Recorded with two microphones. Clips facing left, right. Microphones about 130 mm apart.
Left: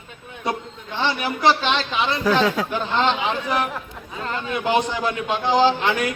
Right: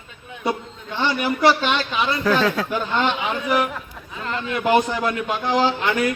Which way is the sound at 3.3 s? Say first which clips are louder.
Right 2 dB; 25° left (ahead or behind).